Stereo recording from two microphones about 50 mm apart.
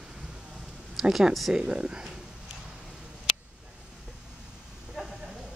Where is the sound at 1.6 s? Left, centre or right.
Centre.